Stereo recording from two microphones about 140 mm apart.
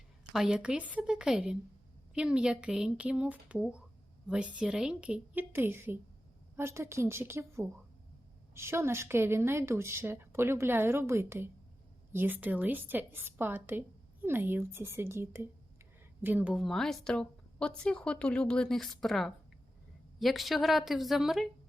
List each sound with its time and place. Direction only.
0.3 s a woman's voice: 5° right (ahead or behind)